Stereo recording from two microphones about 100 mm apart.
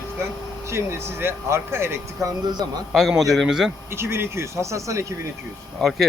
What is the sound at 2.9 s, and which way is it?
Speech, centre (ahead or behind).